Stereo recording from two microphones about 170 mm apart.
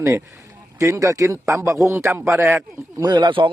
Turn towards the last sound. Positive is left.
turn(degrees=-30)  # may be behind; listen again after turning